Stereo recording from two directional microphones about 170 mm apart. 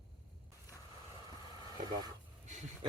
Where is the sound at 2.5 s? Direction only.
45° right (ahead or behind).